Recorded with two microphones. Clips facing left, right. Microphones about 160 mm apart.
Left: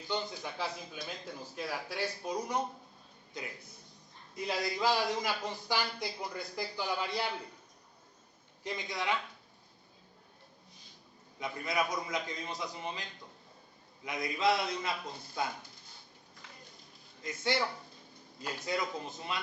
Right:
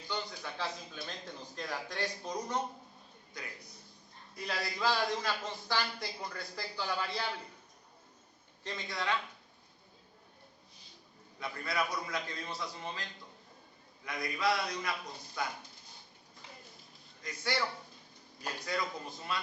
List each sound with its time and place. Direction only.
0.1 s a man's voice: 15° left (ahead or behind)
3.3 s a man's voice: 25° left (ahead or behind)
8.6 s a man's voice: 15° left (ahead or behind)
11.3 s a man's voice: 15° left (ahead or behind)
17.2 s a man's voice: 25° left (ahead or behind)